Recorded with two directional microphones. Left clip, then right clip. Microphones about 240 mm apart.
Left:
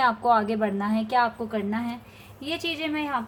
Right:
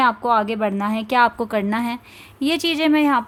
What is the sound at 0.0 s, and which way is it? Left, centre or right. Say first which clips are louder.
Speech: right 4 dB; right.